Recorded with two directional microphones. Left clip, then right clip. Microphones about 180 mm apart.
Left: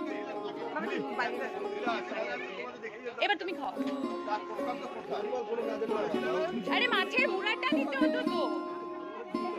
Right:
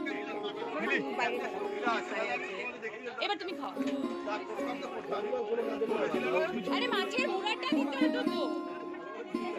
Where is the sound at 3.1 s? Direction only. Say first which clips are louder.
Left 5 dB; 40° left (ahead or behind).